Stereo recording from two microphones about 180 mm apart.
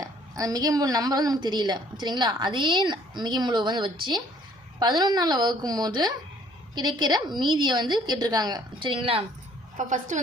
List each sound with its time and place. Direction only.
0.0 s a woman's voice: 20° right (ahead or behind)
9.7 s a woman's voice: 45° right (ahead or behind)